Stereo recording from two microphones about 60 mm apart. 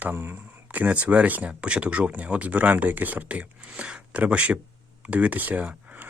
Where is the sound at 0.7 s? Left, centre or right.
Right.